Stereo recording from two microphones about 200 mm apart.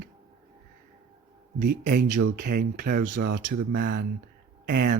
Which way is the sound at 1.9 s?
45° right (ahead or behind).